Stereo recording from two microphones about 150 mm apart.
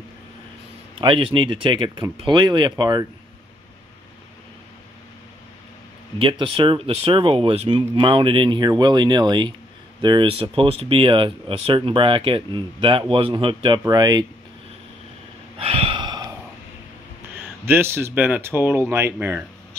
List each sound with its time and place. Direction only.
0.9 s speech: 35° right (ahead or behind)
6.1 s speech: 35° right (ahead or behind)
15.5 s gasp: 40° right (ahead or behind)
17.6 s speech: 15° right (ahead or behind)